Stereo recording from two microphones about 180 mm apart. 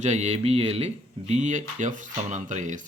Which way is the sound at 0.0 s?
40° right (ahead or behind).